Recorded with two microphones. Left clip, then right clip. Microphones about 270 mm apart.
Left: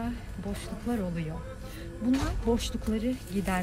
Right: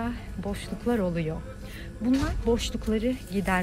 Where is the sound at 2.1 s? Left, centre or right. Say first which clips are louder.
Right 3 dB; left.